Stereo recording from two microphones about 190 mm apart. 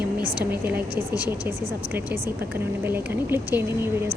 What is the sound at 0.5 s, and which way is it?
Speech, 10° right (ahead or behind).